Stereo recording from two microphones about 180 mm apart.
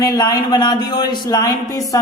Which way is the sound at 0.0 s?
20° left (ahead or behind).